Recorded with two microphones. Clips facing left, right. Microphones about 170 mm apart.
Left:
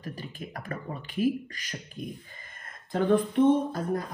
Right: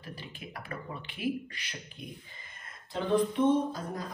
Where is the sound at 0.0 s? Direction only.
45° left (ahead or behind).